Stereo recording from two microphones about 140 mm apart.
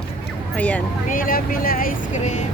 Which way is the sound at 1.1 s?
90° left.